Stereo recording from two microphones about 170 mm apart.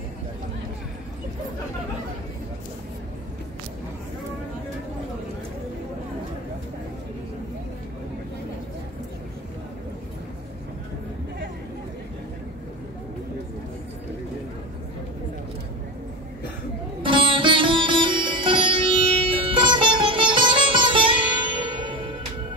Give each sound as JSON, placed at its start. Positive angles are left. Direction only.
{"t": 17.0, "sound": "sitar", "side_deg": -30}